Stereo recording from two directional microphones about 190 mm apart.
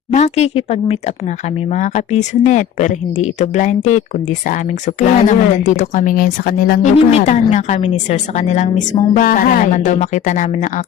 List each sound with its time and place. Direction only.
0.1 s a woman's voice: 35° left (ahead or behind)
7.1 s a woman's voice: 35° left (ahead or behind)